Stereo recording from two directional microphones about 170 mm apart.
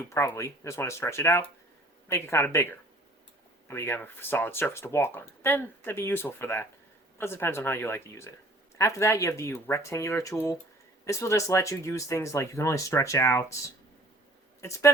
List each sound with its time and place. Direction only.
0.0 s speech: 15° left (ahead or behind)